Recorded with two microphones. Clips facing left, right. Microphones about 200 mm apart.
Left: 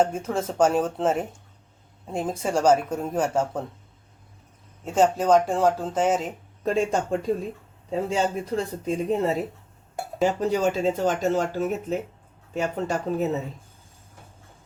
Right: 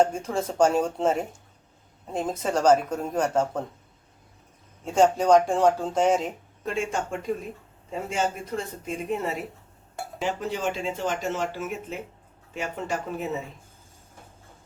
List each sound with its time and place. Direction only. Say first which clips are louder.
0.0 s a woman's voice: even; 5° left (ahead or behind)
4.9 s speech: even; 5° left (ahead or behind)
6.7 s speech: left 5 dB; 35° left (ahead or behind)